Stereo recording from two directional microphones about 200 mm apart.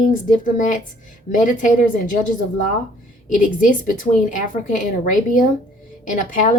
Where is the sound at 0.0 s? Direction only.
40° left (ahead or behind).